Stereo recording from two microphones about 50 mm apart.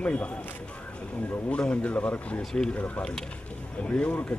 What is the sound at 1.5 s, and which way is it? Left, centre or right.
Speech, left.